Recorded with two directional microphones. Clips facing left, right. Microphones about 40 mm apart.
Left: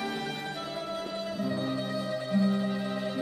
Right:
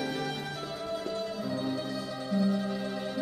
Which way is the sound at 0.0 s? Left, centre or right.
Centre.